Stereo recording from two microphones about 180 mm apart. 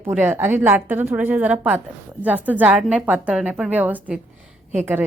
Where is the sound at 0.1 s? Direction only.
10° right (ahead or behind).